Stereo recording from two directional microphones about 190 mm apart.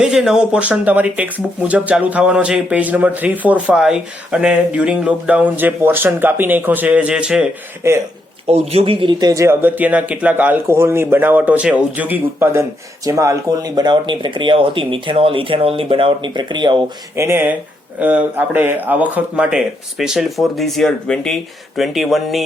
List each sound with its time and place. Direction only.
0.0 s speech: 5° right (ahead or behind)
8.4 s a man's voice: 35° right (ahead or behind); by 22.4 s centre (ahead or behind)